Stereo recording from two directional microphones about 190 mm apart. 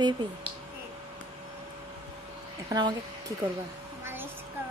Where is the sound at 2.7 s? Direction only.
20° right (ahead or behind).